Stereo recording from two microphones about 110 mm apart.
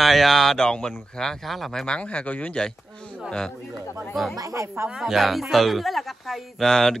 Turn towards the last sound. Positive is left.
turn(degrees=5)  # may be behind; listen again after turning